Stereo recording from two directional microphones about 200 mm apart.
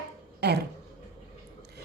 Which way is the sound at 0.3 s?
55° right (ahead or behind).